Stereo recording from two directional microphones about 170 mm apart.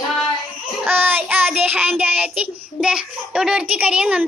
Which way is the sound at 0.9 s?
10° right (ahead or behind).